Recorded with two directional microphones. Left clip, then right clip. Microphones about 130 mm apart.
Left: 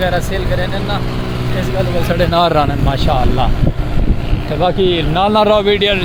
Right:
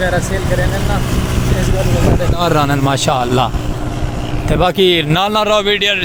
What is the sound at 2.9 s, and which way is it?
Speech, 35° right (ahead or behind).